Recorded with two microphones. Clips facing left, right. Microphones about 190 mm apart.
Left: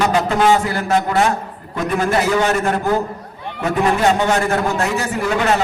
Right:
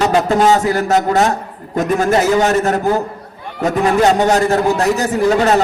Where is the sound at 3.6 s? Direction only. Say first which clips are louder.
Right 3 dB; 40° right (ahead or behind).